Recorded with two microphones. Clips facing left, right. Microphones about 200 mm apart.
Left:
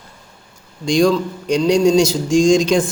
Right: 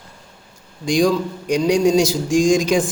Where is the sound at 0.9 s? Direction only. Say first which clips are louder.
Left 2 dB; 15° right (ahead or behind).